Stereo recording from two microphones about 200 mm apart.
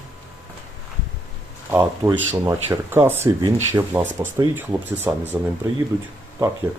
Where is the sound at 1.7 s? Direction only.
10° right (ahead or behind).